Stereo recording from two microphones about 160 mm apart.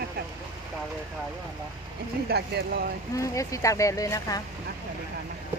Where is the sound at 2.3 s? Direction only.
80° right.